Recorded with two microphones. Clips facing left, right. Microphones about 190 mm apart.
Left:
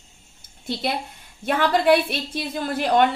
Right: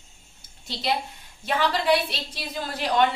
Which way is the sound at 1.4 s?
55° left (ahead or behind).